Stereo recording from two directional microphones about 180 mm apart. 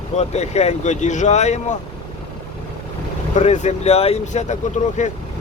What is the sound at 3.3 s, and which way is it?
Speech, 40° left (ahead or behind).